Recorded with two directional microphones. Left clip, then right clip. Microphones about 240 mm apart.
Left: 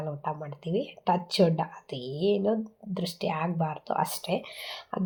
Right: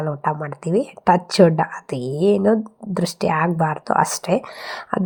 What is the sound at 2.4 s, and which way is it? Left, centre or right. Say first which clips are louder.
A woman's voice: right 10 dB; right.